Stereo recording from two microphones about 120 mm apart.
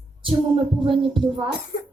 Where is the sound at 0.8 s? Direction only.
45° right (ahead or behind).